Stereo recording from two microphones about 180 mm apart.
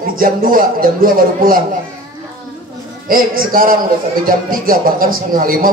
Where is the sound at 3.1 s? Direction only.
50° right (ahead or behind).